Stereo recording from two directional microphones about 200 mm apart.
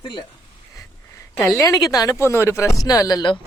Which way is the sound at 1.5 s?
15° left (ahead or behind).